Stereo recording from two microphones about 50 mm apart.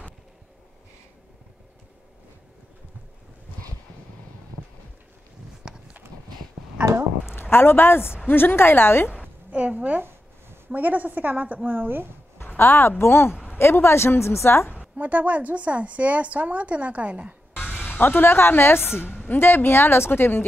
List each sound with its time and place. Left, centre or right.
7.2 s a woman's voice: left
9.5 s a woman's voice: right
11.7 s speech: right
12.5 s a woman's voice: left
14.8 s a woman's voice: right
17.6 s a woman's voice: left